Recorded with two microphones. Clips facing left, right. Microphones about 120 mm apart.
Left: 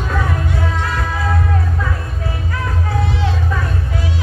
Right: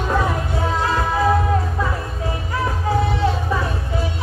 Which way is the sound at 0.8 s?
25° right (ahead or behind).